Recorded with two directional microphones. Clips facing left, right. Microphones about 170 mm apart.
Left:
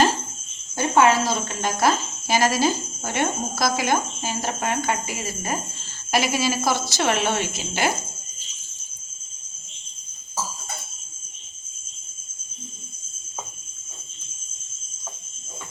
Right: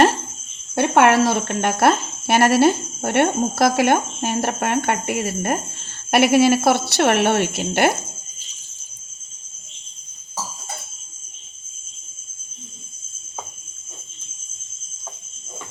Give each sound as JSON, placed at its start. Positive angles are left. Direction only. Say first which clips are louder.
{"t": 0.8, "sound": "speech", "louder": "right 4 dB", "side_deg": -65}